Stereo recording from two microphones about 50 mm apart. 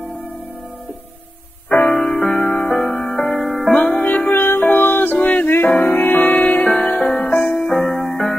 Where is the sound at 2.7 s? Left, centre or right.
Centre.